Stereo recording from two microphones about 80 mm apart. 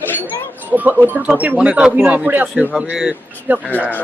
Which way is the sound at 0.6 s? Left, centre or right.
Right.